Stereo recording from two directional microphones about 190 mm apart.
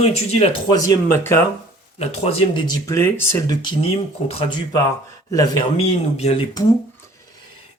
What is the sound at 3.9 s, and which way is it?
Speech, 30° left (ahead or behind).